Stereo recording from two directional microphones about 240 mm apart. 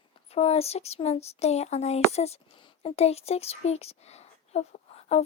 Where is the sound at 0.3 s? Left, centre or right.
Left.